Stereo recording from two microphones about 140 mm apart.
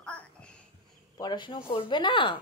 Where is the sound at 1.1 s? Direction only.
30° left (ahead or behind).